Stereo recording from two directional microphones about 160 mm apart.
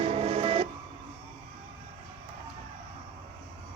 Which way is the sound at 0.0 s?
40° right (ahead or behind).